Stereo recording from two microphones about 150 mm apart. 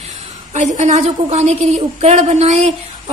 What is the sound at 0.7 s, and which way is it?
A woman's voice, 50° right (ahead or behind).